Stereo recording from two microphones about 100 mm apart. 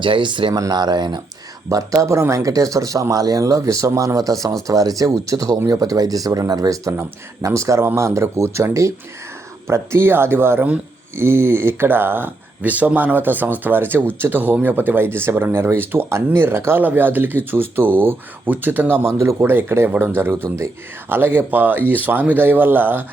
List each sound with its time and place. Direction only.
0.0 s speech: 55° right (ahead or behind)
0.5 s speech: 40° right (ahead or behind)
1.7 s speech: 35° right (ahead or behind)